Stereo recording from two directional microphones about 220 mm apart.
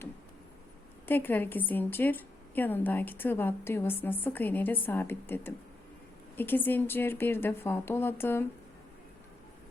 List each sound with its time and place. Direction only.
1.0 s a woman's voice: 10° left (ahead or behind)